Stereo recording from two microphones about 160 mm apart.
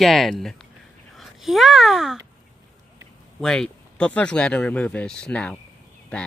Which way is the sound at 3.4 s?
5° left (ahead or behind).